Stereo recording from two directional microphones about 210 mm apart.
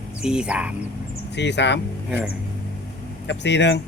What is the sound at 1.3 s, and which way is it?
Speech, 55° left (ahead or behind).